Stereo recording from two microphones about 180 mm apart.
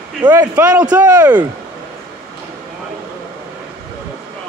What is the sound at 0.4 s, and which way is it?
A man's voice, 10° right (ahead or behind).